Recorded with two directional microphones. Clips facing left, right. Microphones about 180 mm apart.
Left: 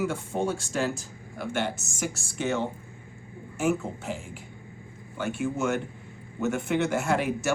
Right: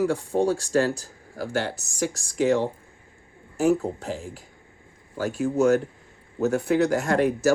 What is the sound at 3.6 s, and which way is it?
Speech, 35° right (ahead or behind).